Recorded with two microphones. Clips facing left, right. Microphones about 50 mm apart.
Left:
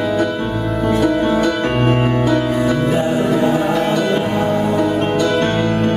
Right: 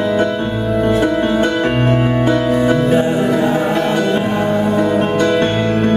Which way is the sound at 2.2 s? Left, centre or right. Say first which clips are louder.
Right 2 dB; right.